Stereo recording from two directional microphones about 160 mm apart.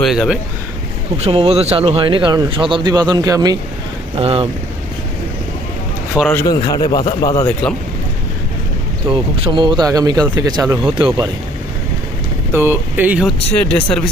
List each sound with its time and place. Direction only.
0.0 s speech: 5° right (ahead or behind)
1.2 s speech: 35° right (ahead or behind); by 3.6 s 20° right (ahead or behind)
4.2 s speech: 40° right (ahead or behind)
6.3 s a man's voice: 25° left (ahead or behind)
9.0 s speech: 30° right (ahead or behind)
12.5 s speech: 15° right (ahead or behind)
13.5 s speech: 10° left (ahead or behind)